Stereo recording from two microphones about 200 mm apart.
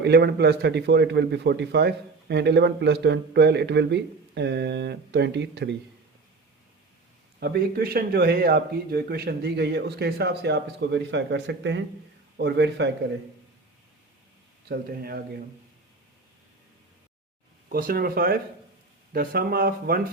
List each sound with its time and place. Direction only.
0.0 s a man's voice: 55° right (ahead or behind)
7.3 s a man's voice: 50° right (ahead or behind)
14.7 s speech: 50° right (ahead or behind)
17.7 s speech: 45° right (ahead or behind)